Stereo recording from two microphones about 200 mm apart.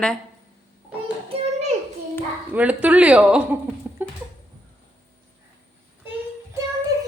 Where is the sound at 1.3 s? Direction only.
35° right (ahead or behind).